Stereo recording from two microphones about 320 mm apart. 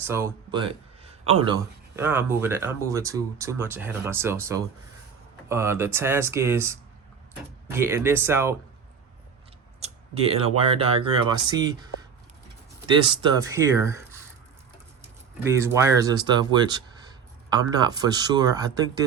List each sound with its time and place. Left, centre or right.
0.0 s speech: centre
9.8 s speech: centre
13.1 s speech: centre
15.4 s speech: centre